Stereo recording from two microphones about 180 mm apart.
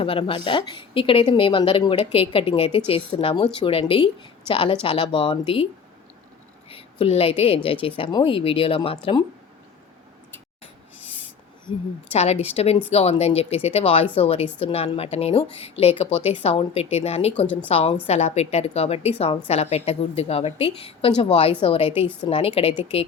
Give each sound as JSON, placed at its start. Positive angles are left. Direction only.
{"t": 0.0, "sound": "a woman's voice", "side_deg": 30}
{"t": 6.7, "sound": "a woman's voice", "side_deg": 30}
{"t": 10.9, "sound": "a sound", "side_deg": -10}
{"t": 11.7, "sound": "a woman's voice", "side_deg": 30}
{"t": 17.3, "sound": "speech", "side_deg": 5}
{"t": 17.7, "sound": "a woman's voice", "side_deg": 35}